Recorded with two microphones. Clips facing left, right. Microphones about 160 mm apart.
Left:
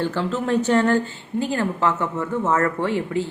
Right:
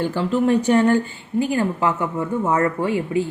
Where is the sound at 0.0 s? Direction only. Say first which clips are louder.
Right 4 dB; 10° right (ahead or behind).